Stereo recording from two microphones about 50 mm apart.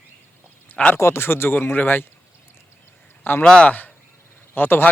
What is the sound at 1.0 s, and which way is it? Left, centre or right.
Speech, left.